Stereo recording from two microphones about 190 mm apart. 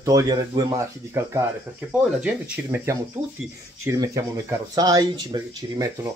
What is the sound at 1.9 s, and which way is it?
Speech, 5° right (ahead or behind).